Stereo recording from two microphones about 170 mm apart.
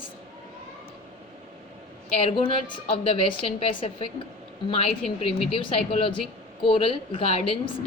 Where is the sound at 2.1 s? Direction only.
35° left (ahead or behind).